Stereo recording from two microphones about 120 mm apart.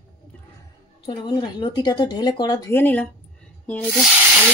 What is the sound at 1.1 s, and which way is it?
Speech, 40° left (ahead or behind).